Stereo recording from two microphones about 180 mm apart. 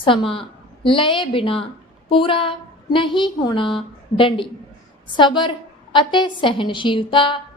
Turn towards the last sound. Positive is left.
turn(degrees=25)  # may be behind; listen again after turning